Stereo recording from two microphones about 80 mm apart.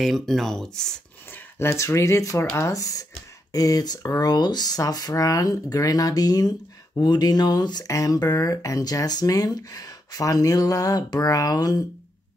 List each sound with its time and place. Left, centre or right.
0.0 s speech: centre
1.3 s speech: left